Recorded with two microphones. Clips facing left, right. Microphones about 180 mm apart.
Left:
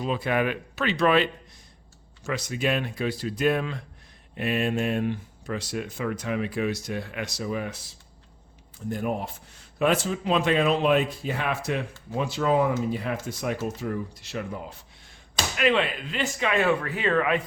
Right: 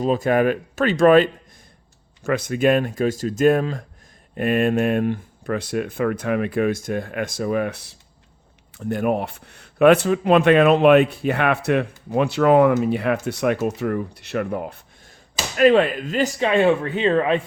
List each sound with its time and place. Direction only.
0.0 s speech: 45° right (ahead or behind); by 14.8 s 60° right (ahead or behind)
15.5 s speech: 40° right (ahead or behind)